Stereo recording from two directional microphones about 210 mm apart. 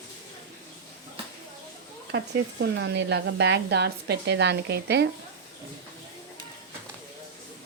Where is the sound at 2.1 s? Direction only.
55° right (ahead or behind).